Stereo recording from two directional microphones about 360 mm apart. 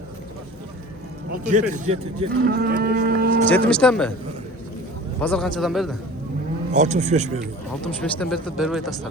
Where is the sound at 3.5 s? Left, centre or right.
Centre.